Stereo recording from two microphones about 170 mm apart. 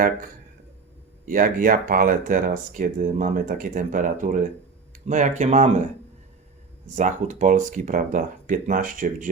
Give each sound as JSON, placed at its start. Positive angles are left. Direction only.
{"t": 1.2, "sound": "speech", "side_deg": -55}
{"t": 6.9, "sound": "speech", "side_deg": -45}